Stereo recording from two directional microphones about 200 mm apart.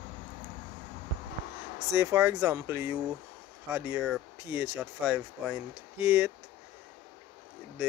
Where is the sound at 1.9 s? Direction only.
10° right (ahead or behind).